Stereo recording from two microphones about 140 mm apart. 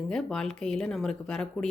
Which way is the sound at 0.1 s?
5° left (ahead or behind).